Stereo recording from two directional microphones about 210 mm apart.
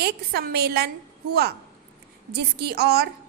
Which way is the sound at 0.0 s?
50° right (ahead or behind).